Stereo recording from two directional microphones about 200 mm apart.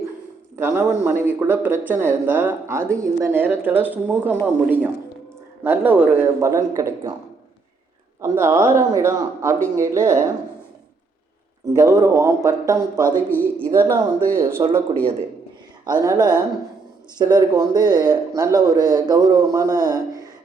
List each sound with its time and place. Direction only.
0.5 s a man's voice: 10° right (ahead or behind)
8.2 s speech: 15° right (ahead or behind)
11.7 s speech: 15° right (ahead or behind)
13.3 s speech: 10° left (ahead or behind)
13.7 s speech: 15° right (ahead or behind)
15.9 s a man's voice: 20° right (ahead or behind)